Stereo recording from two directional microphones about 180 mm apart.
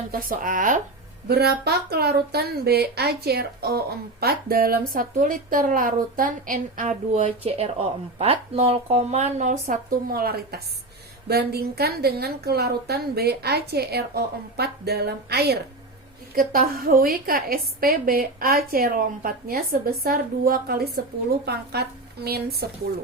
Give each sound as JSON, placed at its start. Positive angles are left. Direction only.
{"t": 0.1, "sound": "speech", "side_deg": -50}
{"t": 1.3, "sound": "speech", "side_deg": -60}